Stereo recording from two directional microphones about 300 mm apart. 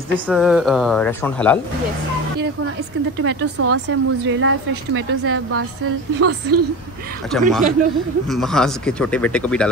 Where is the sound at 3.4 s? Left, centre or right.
Right.